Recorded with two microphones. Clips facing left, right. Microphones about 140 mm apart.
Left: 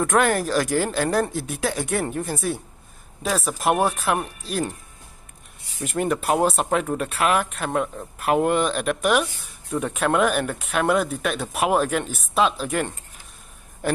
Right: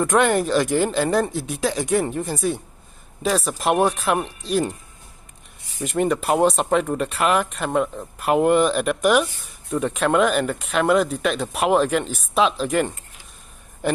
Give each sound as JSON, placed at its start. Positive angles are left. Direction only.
{"t": 0.0, "sound": "speech", "side_deg": 0}
{"t": 5.8, "sound": "speech", "side_deg": 0}